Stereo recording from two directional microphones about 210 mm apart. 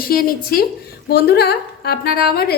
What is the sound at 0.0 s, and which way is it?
A woman's voice, 45° left (ahead or behind).